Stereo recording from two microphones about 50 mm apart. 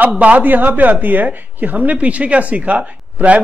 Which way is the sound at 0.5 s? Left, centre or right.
Right.